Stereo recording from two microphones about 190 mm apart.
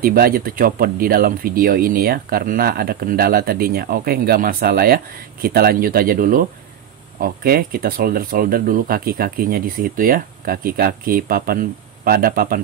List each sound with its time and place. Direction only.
0.0 s speech: 50° right (ahead or behind)